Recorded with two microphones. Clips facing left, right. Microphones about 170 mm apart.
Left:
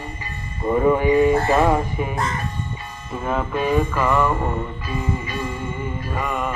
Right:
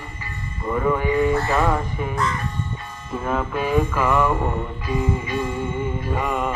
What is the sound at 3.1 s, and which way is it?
Music, centre (ahead or behind).